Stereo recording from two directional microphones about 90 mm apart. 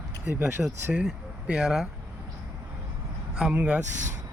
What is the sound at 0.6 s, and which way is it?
Speech, 5° right (ahead or behind).